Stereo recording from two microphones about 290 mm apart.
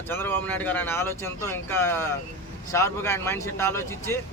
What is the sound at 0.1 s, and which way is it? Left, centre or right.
Speech, centre.